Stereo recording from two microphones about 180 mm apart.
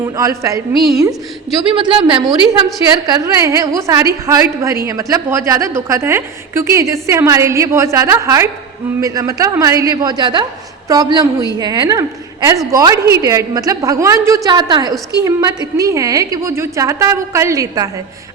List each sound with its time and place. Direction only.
0.0 s a woman's voice: 20° right (ahead or behind)
0.7 s a woman's voice: centre (ahead or behind)
1.6 s a woman's voice: 30° right (ahead or behind)